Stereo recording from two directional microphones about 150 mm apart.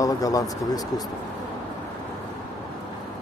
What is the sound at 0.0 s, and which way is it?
Speech, 25° left (ahead or behind).